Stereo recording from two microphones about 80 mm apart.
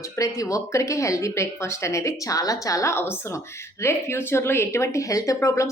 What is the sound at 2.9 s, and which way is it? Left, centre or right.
A woman's voice, left.